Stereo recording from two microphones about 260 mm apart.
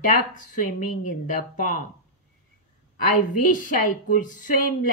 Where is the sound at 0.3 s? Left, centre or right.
Left.